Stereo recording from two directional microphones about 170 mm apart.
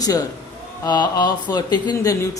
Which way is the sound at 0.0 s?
20° left (ahead or behind).